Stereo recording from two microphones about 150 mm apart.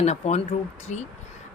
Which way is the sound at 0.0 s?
50° left (ahead or behind).